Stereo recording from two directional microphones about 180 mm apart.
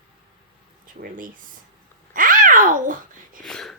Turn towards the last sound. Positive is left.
turn(degrees=5)  # may be behind; listen again after turning